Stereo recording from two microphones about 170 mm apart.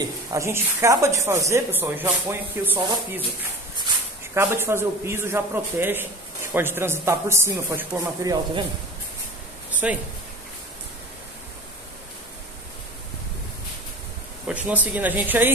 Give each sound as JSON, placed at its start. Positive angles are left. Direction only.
{"t": 0.0, "sound": "a man's voice", "side_deg": -20}
{"t": 4.3, "sound": "a man's voice", "side_deg": -15}
{"t": 9.8, "sound": "speech", "side_deg": -5}
{"t": 14.5, "sound": "a man's voice", "side_deg": -10}